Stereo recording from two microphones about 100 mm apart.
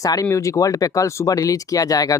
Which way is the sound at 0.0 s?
35° left (ahead or behind).